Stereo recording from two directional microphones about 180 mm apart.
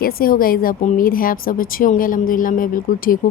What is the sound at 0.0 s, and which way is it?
A woman's voice, 55° left (ahead or behind).